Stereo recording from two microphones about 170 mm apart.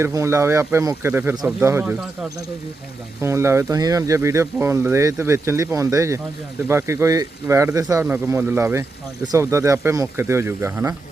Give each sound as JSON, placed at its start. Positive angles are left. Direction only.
{"t": 0.0, "sound": "speech", "side_deg": -20}
{"t": 3.2, "sound": "speech", "side_deg": -15}